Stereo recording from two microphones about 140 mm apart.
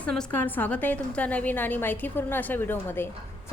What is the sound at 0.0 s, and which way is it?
A woman's voice, 5° left (ahead or behind).